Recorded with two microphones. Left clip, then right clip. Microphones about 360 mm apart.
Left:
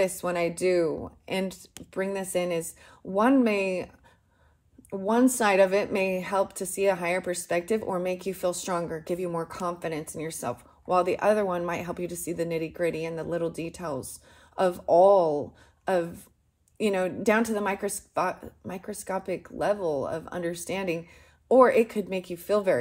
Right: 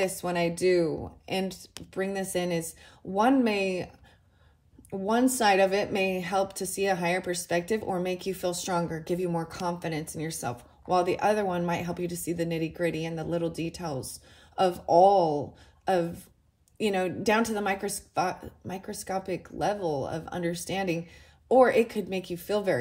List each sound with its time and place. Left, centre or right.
0.0 s a woman's voice: centre
5.4 s a woman's voice: centre